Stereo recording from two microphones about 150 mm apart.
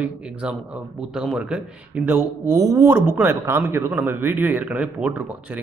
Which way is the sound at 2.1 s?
15° right (ahead or behind).